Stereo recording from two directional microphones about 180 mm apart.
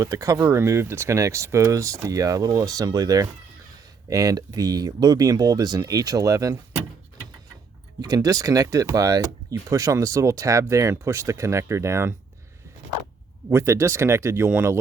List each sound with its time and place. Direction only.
0.0 s speech: 20° right (ahead or behind)
8.0 s speech: 20° right (ahead or behind)
13.5 s speech: 15° right (ahead or behind)